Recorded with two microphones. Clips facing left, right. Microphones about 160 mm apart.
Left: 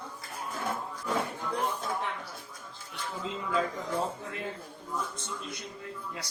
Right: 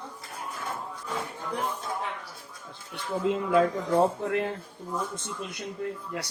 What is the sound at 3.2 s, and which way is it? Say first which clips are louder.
Speech: right 8 dB; 60° right (ahead or behind).